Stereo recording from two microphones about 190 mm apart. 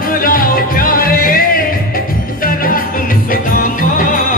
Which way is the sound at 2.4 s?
50° left (ahead or behind).